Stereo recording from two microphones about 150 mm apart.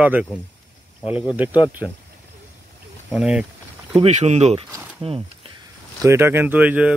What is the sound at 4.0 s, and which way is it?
Speech, 50° right (ahead or behind).